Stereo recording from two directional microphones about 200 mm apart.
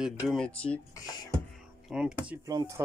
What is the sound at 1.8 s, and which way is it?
Speech, 5° right (ahead or behind).